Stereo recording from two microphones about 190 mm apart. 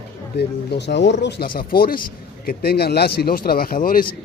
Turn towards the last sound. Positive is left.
turn(degrees=45)  # may be behind; listen again after turning